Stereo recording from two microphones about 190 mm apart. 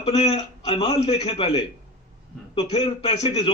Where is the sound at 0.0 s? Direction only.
30° left (ahead or behind).